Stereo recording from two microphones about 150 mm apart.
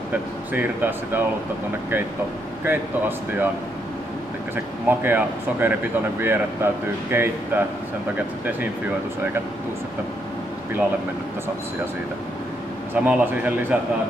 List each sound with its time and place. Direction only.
0.5 s speech: 15° right (ahead or behind)
2.6 s speech: 15° right (ahead or behind)
4.8 s speech: 15° right (ahead or behind)
12.9 s speech: 10° right (ahead or behind)